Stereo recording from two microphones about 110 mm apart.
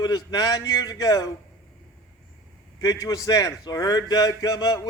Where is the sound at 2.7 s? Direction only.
30° left (ahead or behind).